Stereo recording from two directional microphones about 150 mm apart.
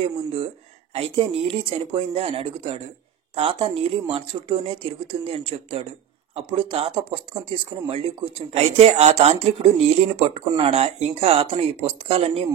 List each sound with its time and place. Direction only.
0.9 s speech: 40° right (ahead or behind)